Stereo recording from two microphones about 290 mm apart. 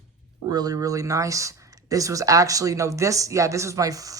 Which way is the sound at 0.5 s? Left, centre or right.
Centre.